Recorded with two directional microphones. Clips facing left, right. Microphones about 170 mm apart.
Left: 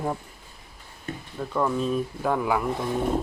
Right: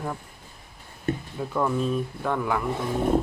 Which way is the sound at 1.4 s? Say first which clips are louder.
Left 2 dB; centre (ahead or behind).